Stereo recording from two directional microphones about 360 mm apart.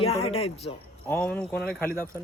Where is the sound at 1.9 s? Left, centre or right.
Centre.